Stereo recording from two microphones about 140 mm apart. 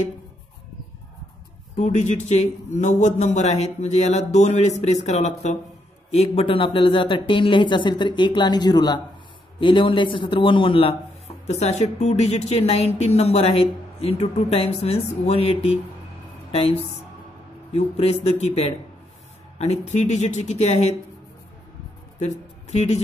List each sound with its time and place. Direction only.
1.8 s a man's voice: 60° left (ahead or behind)
22.2 s speech: 55° left (ahead or behind)